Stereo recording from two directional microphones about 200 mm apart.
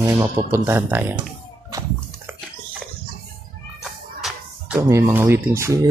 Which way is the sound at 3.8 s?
Centre (ahead or behind).